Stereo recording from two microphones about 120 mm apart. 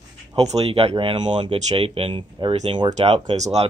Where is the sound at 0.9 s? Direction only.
40° right (ahead or behind).